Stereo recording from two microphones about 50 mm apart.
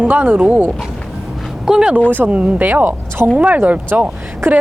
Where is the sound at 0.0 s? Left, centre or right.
Right.